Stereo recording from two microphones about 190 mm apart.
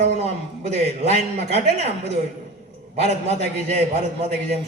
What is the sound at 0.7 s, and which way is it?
A man's voice, 35° right (ahead or behind).